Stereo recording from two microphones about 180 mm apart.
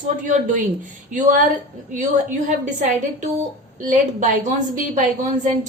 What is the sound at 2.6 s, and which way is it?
A woman's voice, 40° right (ahead or behind).